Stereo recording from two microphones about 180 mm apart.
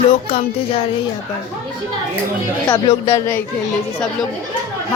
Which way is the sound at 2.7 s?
20° left (ahead or behind).